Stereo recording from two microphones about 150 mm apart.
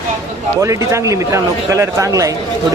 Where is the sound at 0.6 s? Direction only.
20° right (ahead or behind).